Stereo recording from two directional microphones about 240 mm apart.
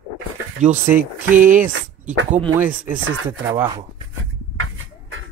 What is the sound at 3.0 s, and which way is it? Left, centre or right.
Speech, right.